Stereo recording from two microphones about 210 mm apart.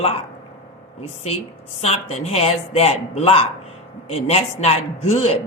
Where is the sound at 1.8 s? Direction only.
30° left (ahead or behind).